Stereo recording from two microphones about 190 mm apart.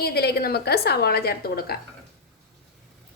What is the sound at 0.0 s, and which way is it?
A woman's voice, 55° left (ahead or behind).